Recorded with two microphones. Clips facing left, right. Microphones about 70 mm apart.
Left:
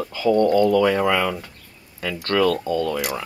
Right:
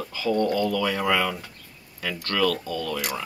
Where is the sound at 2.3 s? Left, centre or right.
Left.